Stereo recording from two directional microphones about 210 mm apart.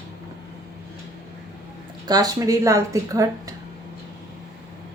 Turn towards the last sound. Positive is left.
turn(degrees=-15)  # may be behind; listen again after turning